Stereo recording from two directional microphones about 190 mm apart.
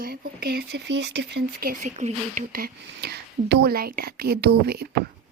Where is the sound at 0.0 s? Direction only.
50° right (ahead or behind).